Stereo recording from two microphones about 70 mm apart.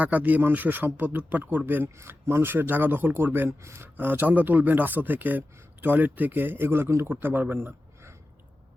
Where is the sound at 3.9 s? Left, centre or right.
Right.